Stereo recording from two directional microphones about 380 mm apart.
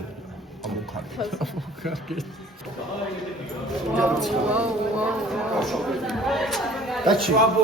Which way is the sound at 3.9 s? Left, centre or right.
Centre.